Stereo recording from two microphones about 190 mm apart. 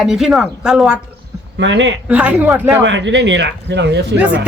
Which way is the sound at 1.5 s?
70° right (ahead or behind).